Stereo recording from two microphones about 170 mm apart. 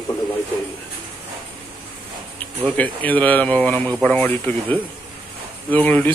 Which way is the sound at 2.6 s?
10° left (ahead or behind).